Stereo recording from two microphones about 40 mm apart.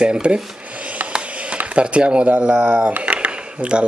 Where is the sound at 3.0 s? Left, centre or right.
Right.